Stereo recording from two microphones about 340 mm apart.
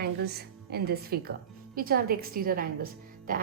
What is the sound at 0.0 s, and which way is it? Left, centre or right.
A woman's voice, right.